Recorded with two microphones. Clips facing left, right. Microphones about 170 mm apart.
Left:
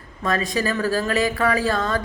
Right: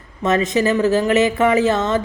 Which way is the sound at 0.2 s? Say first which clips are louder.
Right 6 dB; 20° right (ahead or behind).